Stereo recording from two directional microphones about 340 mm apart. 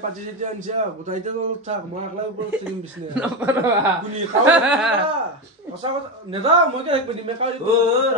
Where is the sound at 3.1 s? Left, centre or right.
Centre.